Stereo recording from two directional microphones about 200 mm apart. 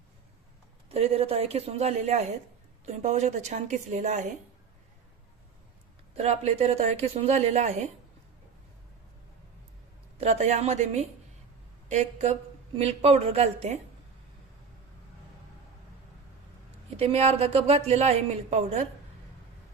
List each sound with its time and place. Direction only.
0.9 s a woman's voice: 30° right (ahead or behind)
6.1 s a woman's voice: 30° right (ahead or behind)
10.2 s a woman's voice: 35° right (ahead or behind)
17.0 s a woman's voice: 30° right (ahead or behind)